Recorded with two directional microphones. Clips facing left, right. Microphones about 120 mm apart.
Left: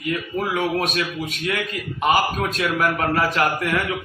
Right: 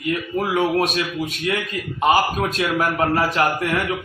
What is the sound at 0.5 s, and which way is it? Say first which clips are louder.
A man's voice: right 4 dB; 25° right (ahead or behind).